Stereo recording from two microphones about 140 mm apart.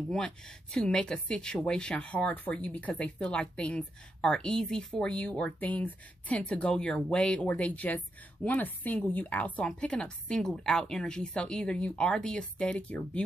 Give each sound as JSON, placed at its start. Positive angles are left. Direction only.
{"t": 0.1, "sound": "speech", "side_deg": 5}